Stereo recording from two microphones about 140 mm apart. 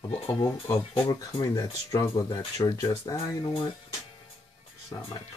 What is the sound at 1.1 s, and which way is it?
Speech, 25° left (ahead or behind).